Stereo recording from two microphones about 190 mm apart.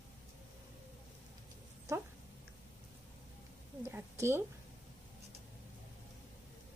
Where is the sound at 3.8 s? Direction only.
15° right (ahead or behind).